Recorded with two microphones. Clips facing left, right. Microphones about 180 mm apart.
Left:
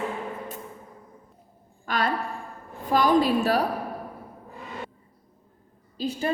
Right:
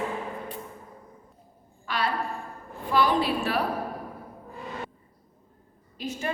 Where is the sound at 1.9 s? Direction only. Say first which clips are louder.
Left 3 dB; 45° left (ahead or behind).